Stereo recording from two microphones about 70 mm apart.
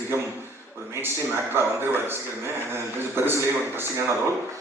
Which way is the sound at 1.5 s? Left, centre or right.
Right.